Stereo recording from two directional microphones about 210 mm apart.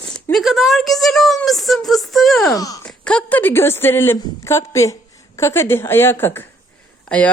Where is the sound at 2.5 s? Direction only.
15° left (ahead or behind).